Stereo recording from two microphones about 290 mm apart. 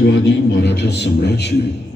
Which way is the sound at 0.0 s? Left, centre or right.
Left.